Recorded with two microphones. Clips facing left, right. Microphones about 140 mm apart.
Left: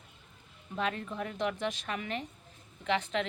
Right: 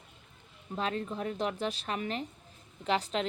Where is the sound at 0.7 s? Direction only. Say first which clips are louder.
Right 1 dB; 35° right (ahead or behind).